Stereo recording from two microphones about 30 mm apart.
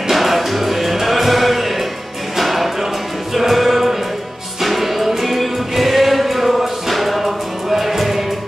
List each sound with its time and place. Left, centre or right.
0.1 s music: centre